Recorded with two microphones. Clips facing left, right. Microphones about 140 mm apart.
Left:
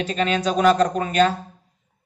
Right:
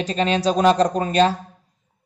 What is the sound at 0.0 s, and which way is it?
Speech, 35° right (ahead or behind).